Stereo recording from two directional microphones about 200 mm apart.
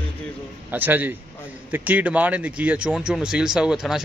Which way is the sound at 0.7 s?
10° right (ahead or behind).